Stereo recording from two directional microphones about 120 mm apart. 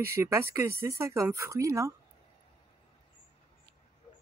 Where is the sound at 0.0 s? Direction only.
20° right (ahead or behind).